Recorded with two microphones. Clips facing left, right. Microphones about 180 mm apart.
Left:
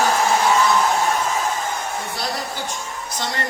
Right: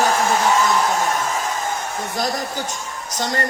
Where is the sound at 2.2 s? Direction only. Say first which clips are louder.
Right 3 dB; 45° right (ahead or behind).